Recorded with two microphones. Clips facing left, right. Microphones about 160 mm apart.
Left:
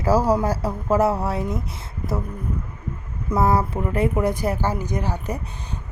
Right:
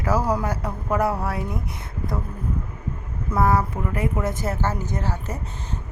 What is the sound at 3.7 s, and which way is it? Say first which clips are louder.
Speech: left 3 dB; 25° left (ahead or behind).